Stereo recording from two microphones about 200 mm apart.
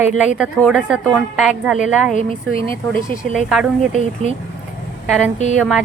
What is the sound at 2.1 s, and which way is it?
Speech, 45° left (ahead or behind).